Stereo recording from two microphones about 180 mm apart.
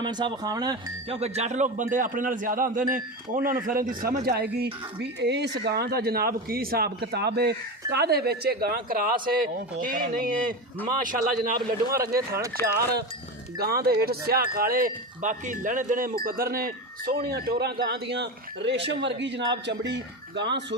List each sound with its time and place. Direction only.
0.0 s speech: 25° right (ahead or behind)
1.2 s a man's voice: 40° right (ahead or behind)
11.9 s speech: 20° right (ahead or behind)
12.6 s cowbell: 15° left (ahead or behind)
13.6 s speech: 60° right (ahead or behind); by 20.7 s 75° right (ahead or behind)